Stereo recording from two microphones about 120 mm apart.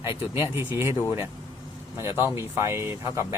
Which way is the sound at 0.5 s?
20° right (ahead or behind).